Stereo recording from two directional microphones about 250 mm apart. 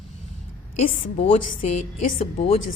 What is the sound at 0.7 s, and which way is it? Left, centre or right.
A woman's voice, left.